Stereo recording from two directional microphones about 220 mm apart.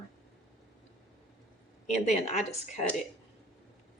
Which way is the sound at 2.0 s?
30° left (ahead or behind).